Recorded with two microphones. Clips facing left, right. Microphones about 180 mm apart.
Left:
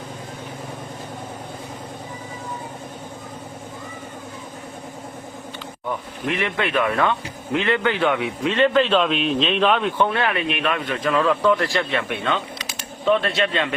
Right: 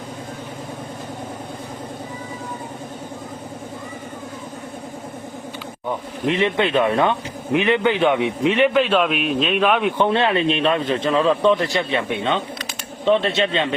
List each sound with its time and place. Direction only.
6.2 s a man's voice: 25° right (ahead or behind)
10.1 s speech: 25° right (ahead or behind)